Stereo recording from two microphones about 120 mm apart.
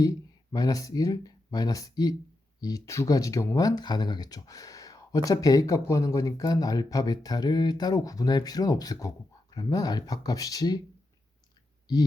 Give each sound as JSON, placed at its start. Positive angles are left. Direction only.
{"t": 0.5, "sound": "speech", "side_deg": 30}